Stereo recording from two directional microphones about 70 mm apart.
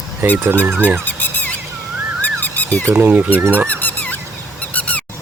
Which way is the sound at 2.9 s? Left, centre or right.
Right.